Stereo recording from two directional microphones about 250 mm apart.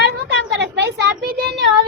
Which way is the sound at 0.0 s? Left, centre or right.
Right.